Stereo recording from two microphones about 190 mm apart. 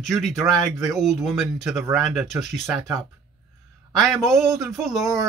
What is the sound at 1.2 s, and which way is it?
Speech, centre (ahead or behind).